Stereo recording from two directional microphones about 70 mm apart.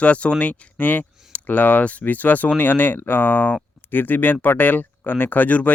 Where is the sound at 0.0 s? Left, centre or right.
Centre.